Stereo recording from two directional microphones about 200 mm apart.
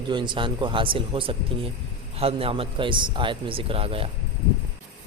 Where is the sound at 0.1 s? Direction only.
25° right (ahead or behind).